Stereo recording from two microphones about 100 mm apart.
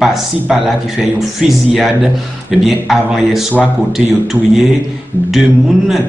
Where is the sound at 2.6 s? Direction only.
5° right (ahead or behind).